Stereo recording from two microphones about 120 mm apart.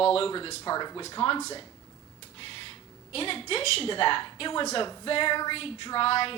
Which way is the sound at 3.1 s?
50° left (ahead or behind).